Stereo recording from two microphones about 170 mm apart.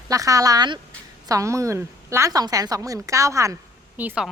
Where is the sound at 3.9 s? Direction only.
5° right (ahead or behind).